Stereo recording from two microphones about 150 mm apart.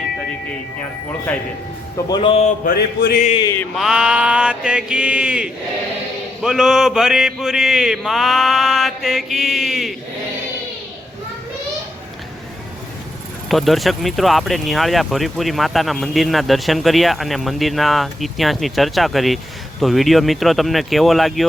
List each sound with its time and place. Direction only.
2.0 s speech: 30° left (ahead or behind)
2.4 s mantra: 55° left (ahead or behind)
2.7 s music: 90° left
3.8 s mantra: 5° right (ahead or behind)
6.4 s speech: 5° right (ahead or behind)
13.5 s speech: centre (ahead or behind)